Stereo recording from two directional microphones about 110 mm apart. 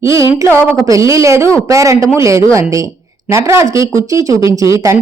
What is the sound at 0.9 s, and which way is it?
Speech, 30° right (ahead or behind).